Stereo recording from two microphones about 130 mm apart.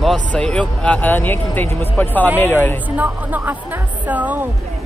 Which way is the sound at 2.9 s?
15° right (ahead or behind).